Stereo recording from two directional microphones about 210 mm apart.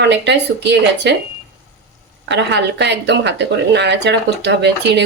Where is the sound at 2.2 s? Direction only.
55° right (ahead or behind).